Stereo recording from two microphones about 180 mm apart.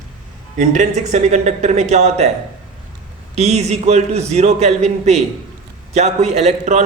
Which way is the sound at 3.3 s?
35° right (ahead or behind).